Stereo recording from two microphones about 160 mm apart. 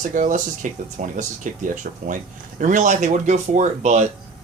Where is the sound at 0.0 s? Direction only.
55° right (ahead or behind).